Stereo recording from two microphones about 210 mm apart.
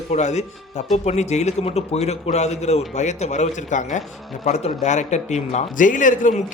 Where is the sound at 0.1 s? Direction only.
35° left (ahead or behind).